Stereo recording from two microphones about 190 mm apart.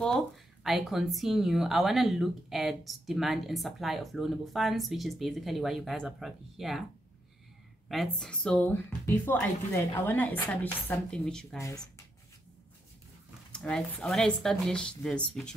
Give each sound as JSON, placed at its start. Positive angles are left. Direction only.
{"t": 0.7, "sound": "speech", "side_deg": 0}
{"t": 7.9, "sound": "speech", "side_deg": 0}
{"t": 11.5, "sound": "speech", "side_deg": 15}
{"t": 13.5, "sound": "speech", "side_deg": 5}